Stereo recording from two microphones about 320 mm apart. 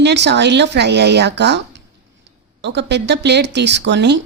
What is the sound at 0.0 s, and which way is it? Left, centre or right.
A woman's voice, right.